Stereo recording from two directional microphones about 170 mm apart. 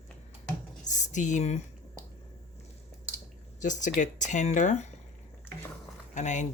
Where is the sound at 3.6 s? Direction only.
45° left (ahead or behind).